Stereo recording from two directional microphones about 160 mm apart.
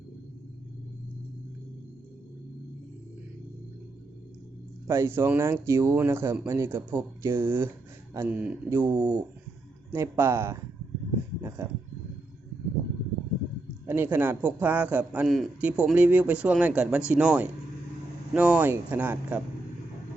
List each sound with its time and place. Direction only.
4.9 s a man's voice: 15° right (ahead or behind)
13.8 s a man's voice: 10° right (ahead or behind)